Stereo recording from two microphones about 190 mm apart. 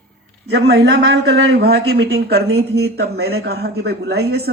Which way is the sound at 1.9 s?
60° right (ahead or behind).